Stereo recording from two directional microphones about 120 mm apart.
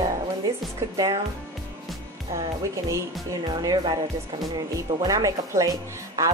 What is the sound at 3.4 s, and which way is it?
A woman's voice, 35° right (ahead or behind).